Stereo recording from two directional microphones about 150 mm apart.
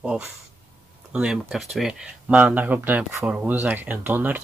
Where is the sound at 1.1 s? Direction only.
5° right (ahead or behind).